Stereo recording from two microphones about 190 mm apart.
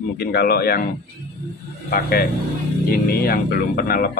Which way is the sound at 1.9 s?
55° left (ahead or behind).